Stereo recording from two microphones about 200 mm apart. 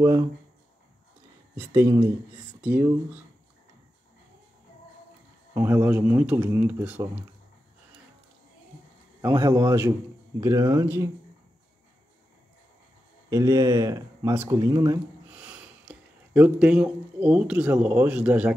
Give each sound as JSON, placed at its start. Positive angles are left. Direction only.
{"t": 1.6, "sound": "speech", "side_deg": -15}
{"t": 5.5, "sound": "speech", "side_deg": -10}
{"t": 9.3, "sound": "speech", "side_deg": -15}
{"t": 13.3, "sound": "speech", "side_deg": -15}